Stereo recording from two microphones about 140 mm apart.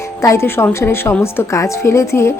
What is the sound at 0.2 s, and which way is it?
A woman's voice, 20° left (ahead or behind).